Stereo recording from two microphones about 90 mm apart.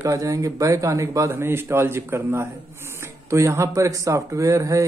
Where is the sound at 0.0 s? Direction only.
40° right (ahead or behind).